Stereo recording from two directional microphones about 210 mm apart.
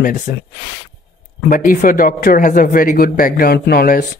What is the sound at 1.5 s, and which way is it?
Speech, 40° left (ahead or behind).